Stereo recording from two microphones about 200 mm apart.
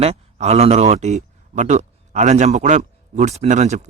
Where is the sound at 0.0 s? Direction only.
30° right (ahead or behind).